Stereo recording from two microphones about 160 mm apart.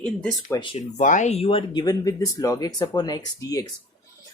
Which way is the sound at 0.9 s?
50° left (ahead or behind).